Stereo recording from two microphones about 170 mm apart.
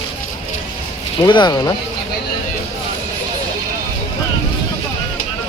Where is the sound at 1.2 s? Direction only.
25° left (ahead or behind).